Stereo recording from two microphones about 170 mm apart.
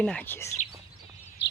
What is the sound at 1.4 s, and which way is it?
Bird, 90° left.